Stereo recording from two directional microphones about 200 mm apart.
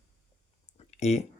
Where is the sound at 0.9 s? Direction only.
30° left (ahead or behind).